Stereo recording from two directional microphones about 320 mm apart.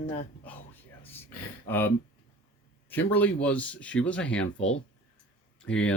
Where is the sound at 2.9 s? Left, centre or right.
Centre.